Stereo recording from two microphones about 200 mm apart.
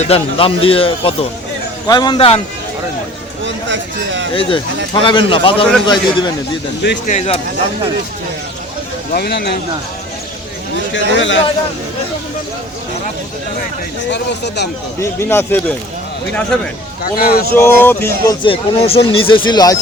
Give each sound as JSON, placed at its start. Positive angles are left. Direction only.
{"t": 0.0, "sound": "speech", "side_deg": 30}
{"t": 3.4, "sound": "speech", "side_deg": -65}
{"t": 4.4, "sound": "speech", "side_deg": 25}
{"t": 9.1, "sound": "speech", "side_deg": 50}
{"t": 10.9, "sound": "speech", "side_deg": 70}
{"t": 14.1, "sound": "speech", "side_deg": 55}
{"t": 15.2, "sound": "speech", "side_deg": 10}
{"t": 17.0, "sound": "speech", "side_deg": 50}
{"t": 17.5, "sound": "speech", "side_deg": 10}
{"t": 18.4, "sound": "speech", "side_deg": 25}